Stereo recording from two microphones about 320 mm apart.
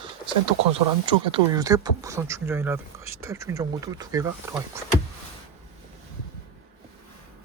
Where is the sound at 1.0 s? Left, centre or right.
Centre.